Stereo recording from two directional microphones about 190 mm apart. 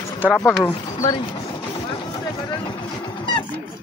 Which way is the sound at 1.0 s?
25° left (ahead or behind).